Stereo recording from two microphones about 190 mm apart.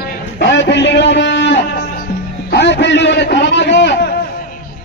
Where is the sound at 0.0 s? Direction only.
65° left (ahead or behind).